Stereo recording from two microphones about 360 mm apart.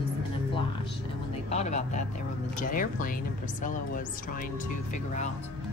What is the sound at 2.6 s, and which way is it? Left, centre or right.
Music, left.